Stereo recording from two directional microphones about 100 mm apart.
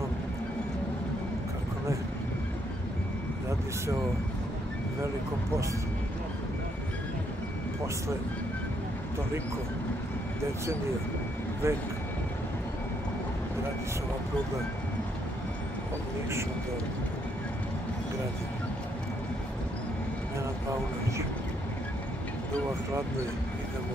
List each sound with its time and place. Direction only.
11.6 s speech: 25° right (ahead or behind)